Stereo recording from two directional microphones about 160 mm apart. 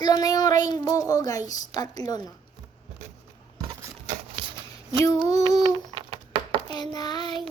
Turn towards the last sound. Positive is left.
turn(degrees=25)  # may be behind; listen again after turning